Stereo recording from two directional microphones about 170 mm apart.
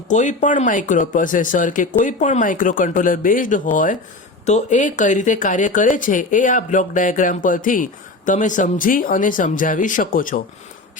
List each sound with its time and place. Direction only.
0.1 s speech: 45° left (ahead or behind)